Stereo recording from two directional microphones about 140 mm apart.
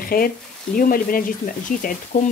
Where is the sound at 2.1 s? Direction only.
65° left (ahead or behind).